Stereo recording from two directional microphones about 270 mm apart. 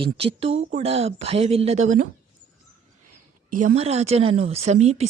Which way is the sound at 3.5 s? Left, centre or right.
Right.